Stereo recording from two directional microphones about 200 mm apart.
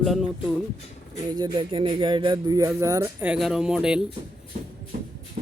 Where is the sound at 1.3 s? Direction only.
20° right (ahead or behind); by 4.1 s 5° right (ahead or behind).